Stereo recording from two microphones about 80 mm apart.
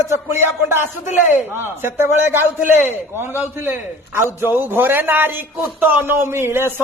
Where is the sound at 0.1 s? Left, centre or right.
Right.